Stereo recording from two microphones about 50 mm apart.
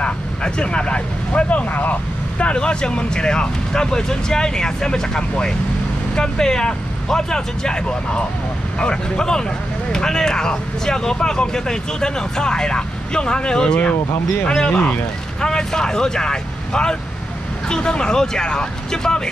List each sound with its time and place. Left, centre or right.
0.0 s speech: centre
2.3 s speech: left
14.8 s speech: left
15.4 s speech: centre